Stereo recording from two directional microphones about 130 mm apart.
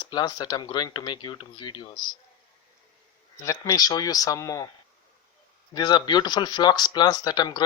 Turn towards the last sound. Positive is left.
turn(degrees=30)  # may be behind; listen again after turning